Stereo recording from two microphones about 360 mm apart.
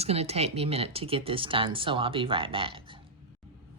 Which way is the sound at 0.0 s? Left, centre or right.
Centre.